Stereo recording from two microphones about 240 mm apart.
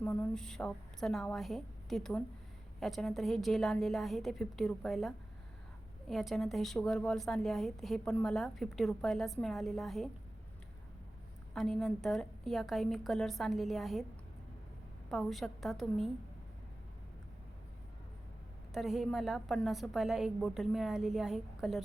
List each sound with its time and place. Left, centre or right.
0.0 s a woman's voice: centre
11.5 s a woman's voice: centre
15.1 s a woman's voice: centre
18.7 s a woman's voice: centre